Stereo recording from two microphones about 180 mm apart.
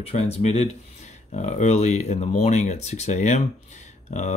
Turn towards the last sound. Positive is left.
turn(degrees=40)  # may be behind; listen again after turning